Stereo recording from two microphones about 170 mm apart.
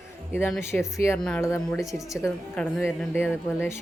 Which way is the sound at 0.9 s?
15° left (ahead or behind).